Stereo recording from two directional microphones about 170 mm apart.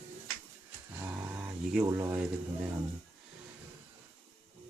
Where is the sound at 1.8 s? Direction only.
20° right (ahead or behind).